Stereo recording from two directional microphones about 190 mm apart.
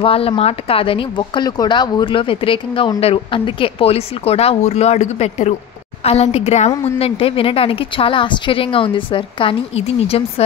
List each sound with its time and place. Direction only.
0.0 s a woman's voice: 30° left (ahead or behind)